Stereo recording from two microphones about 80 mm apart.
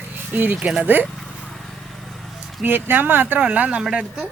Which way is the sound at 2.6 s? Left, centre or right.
Right.